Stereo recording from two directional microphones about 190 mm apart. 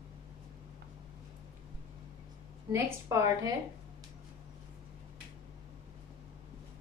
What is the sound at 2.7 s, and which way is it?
Speech, 15° right (ahead or behind).